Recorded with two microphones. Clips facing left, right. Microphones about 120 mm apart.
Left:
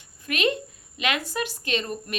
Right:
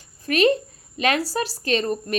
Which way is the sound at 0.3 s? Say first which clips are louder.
Right 7 dB; 35° right (ahead or behind).